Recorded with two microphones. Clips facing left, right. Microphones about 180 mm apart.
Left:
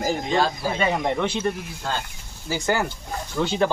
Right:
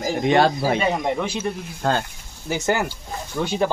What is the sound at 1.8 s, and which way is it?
Speech, 55° right (ahead or behind).